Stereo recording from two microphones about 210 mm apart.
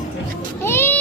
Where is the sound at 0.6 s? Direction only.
10° left (ahead or behind).